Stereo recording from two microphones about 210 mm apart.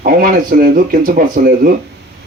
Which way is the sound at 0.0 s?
40° right (ahead or behind).